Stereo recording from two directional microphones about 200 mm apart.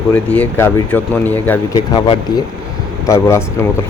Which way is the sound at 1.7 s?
20° left (ahead or behind).